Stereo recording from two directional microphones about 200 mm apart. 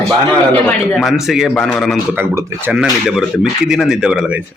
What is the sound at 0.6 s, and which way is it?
A man's voice, centre (ahead or behind).